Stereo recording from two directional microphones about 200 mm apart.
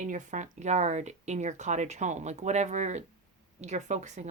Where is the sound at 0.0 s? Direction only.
40° right (ahead or behind).